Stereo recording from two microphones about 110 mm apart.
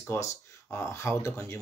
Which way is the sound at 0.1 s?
30° left (ahead or behind).